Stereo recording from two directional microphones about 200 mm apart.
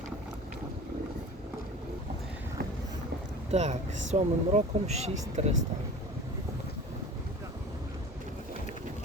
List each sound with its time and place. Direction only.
3.5 s speech: 35° right (ahead or behind)